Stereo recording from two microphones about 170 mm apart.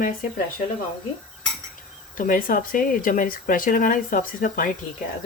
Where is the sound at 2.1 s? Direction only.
55° left (ahead or behind).